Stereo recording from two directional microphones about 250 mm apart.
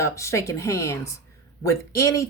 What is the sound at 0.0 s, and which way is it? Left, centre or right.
Speech, centre.